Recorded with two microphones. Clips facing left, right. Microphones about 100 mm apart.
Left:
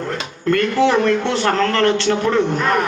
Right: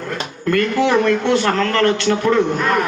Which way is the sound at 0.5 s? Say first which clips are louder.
Even; 30° left (ahead or behind).